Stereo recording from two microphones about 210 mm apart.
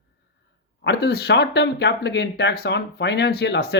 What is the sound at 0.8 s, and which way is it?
Speech, 50° left (ahead or behind).